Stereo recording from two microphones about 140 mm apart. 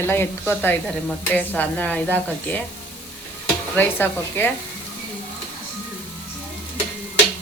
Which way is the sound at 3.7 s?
15° left (ahead or behind).